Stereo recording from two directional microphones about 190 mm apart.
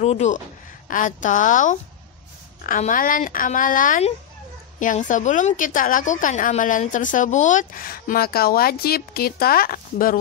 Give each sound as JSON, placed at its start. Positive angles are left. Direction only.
{"t": 0.0, "sound": "a woman's voice", "side_deg": 35}